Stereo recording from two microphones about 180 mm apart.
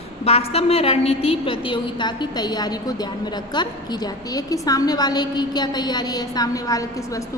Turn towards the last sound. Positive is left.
turn(degrees=20)  # may be behind; listen again after turning